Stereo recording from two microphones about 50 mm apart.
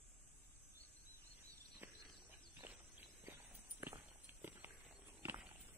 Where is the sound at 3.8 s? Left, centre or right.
Right.